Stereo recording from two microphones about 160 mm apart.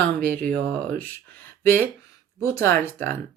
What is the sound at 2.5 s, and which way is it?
Speech, 15° left (ahead or behind).